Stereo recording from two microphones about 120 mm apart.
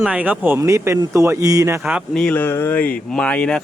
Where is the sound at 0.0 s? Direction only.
10° right (ahead or behind).